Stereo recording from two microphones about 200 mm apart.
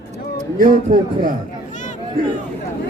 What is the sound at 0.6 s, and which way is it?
Speech, 45° right (ahead or behind).